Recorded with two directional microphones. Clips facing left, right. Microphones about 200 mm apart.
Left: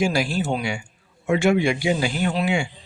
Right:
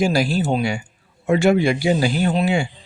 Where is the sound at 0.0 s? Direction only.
35° right (ahead or behind).